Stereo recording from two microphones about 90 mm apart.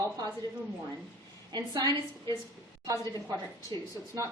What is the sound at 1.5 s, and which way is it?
Speech, 45° right (ahead or behind).